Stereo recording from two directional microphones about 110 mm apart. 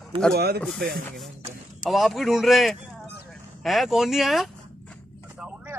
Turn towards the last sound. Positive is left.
turn(degrees=0)  # may be behind; listen again after turning